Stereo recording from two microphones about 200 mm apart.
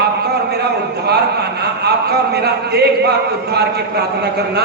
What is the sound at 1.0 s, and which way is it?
A man's voice, 55° right (ahead or behind).